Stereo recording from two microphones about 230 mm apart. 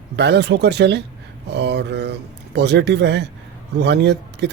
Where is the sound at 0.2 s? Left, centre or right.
Right.